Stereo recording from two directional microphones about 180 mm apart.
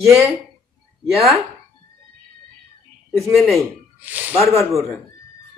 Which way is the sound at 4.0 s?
10° right (ahead or behind).